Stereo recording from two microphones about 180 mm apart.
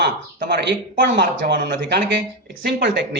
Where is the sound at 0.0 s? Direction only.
65° right (ahead or behind).